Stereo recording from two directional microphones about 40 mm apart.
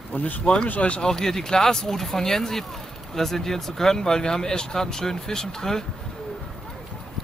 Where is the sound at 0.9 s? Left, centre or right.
Centre.